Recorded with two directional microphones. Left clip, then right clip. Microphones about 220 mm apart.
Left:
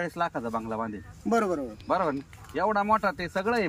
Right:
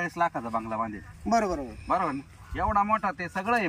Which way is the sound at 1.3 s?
5° left (ahead or behind).